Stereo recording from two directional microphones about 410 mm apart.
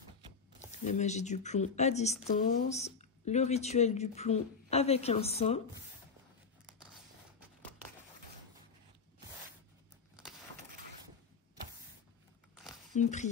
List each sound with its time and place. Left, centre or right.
0.7 s speech: centre
12.9 s speech: centre